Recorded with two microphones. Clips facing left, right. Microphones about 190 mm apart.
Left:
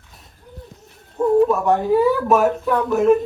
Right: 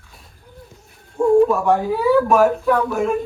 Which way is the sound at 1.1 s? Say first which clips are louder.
Right 2 dB; centre (ahead or behind).